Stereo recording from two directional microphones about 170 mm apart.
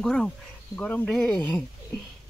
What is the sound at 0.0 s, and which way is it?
Speech, 5° left (ahead or behind).